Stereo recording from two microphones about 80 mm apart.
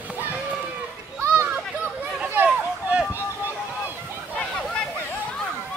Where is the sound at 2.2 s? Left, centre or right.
Right.